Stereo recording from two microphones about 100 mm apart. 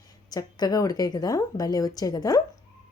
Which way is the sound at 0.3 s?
40° left (ahead or behind).